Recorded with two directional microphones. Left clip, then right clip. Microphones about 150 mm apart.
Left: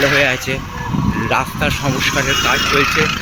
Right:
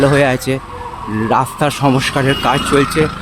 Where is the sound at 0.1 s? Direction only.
45° right (ahead or behind).